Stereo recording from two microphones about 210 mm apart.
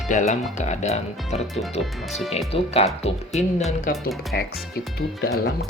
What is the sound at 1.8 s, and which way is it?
Speech, centre (ahead or behind).